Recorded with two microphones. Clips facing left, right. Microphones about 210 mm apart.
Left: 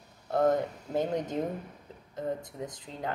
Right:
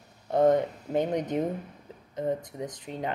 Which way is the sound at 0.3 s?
20° right (ahead or behind).